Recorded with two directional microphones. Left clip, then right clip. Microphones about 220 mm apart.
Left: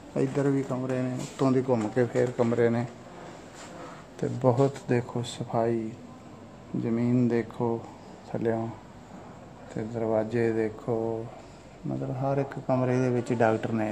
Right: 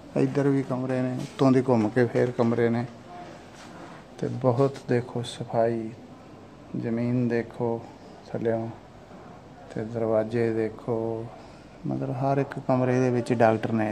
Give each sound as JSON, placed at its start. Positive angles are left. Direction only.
{"t": 0.1, "sound": "speech", "side_deg": -20}
{"t": 4.2, "sound": "speech", "side_deg": -5}
{"t": 6.8, "sound": "speech", "side_deg": 0}
{"t": 9.8, "sound": "speech", "side_deg": -10}
{"t": 12.1, "sound": "speech", "side_deg": -15}